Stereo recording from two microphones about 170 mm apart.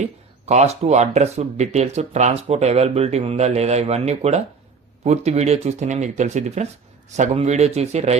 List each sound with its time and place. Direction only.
0.4 s speech: 40° right (ahead or behind)